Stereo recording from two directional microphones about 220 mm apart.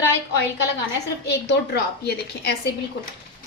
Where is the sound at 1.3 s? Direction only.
50° left (ahead or behind).